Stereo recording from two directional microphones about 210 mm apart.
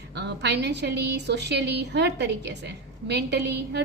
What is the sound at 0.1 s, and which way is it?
A woman's voice, 55° right (ahead or behind).